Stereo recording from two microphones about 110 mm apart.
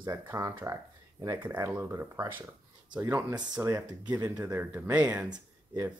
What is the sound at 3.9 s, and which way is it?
Speech, 40° right (ahead or behind).